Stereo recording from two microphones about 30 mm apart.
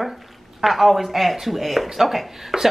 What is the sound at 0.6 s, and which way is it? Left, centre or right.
Speech, centre.